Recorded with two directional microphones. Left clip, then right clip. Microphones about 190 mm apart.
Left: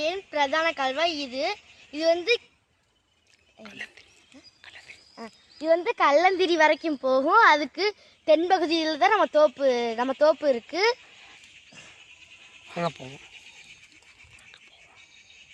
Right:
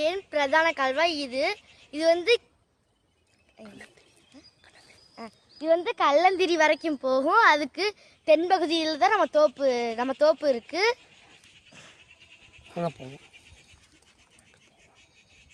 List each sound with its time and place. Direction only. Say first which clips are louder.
0.0 s speech: even; 25° right (ahead or behind)
5.1 s speech: right 1 dB; 40° left (ahead or behind)
12.7 s speech: left 2 dB; centre (ahead or behind)